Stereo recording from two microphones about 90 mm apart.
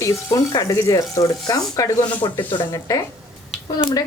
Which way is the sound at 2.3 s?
60° left (ahead or behind).